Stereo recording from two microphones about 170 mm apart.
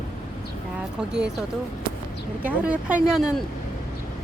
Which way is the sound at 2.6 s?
5° right (ahead or behind).